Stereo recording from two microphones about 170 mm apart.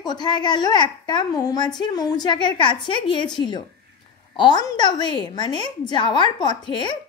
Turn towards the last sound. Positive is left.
turn(degrees=30)  # may be behind; listen again after turning